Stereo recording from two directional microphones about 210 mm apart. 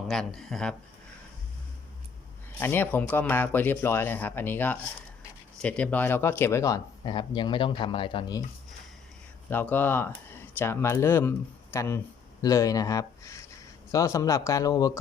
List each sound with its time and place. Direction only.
0.1 s speech: centre (ahead or behind)
2.6 s speech: 10° left (ahead or behind)
9.5 s speech: 10° left (ahead or behind)